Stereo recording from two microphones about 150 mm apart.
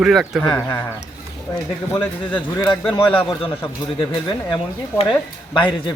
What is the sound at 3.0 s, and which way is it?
Speech, 35° left (ahead or behind).